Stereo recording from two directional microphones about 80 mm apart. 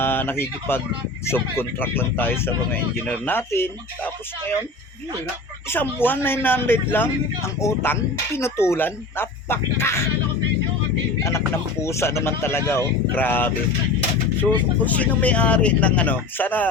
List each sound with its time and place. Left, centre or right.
0.0 s a man's voice: left
5.7 s a man's voice: left
11.2 s speech: left
14.8 s speech: centre